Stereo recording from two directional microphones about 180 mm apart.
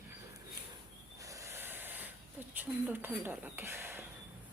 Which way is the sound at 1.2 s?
20° right (ahead or behind).